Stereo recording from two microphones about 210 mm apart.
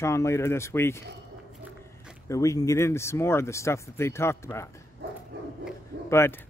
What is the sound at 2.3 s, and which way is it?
Speech, 15° left (ahead or behind).